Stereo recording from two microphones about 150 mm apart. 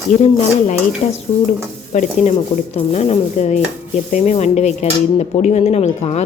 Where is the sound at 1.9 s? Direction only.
50° left (ahead or behind).